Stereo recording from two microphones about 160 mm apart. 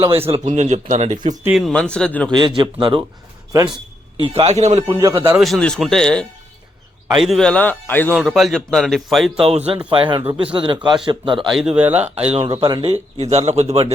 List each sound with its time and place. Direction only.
0.4 s speech: 45° right (ahead or behind)
1.5 s speech: centre (ahead or behind)
2.6 s speech: 30° right (ahead or behind)
4.2 s speech: 40° right (ahead or behind)
4.9 s speech: 20° right (ahead or behind)
5.4 s a man's voice: 5° left (ahead or behind)
8.1 s speech: centre (ahead or behind)
9.5 s speech: 40° right (ahead or behind)
11.4 s speech: 5° right (ahead or behind)
12.3 s speech: 35° right (ahead or behind)